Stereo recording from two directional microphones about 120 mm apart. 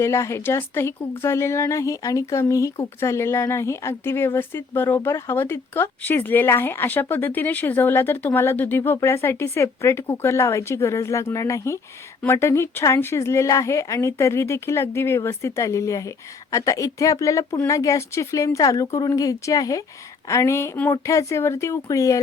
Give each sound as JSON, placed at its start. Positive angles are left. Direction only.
{"t": 0.0, "sound": "a woman's voice", "side_deg": 20}